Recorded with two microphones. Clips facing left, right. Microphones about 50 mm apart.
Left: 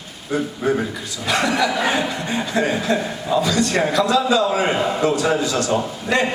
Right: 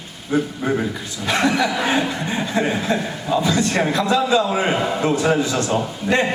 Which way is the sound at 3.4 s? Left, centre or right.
Right.